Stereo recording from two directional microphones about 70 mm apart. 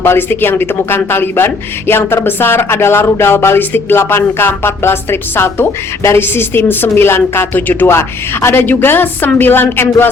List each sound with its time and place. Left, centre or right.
0.0 s speech: left